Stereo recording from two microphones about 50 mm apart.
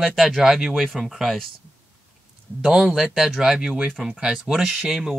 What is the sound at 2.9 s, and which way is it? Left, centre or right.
Speech, centre.